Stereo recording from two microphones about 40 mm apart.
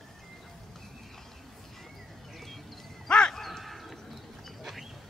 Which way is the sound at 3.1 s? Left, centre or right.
Centre.